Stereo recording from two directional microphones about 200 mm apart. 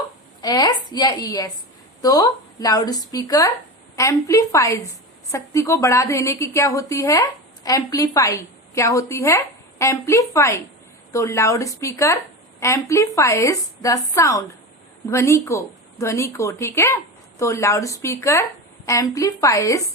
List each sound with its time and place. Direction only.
0.4 s a woman's voice: 20° left (ahead or behind)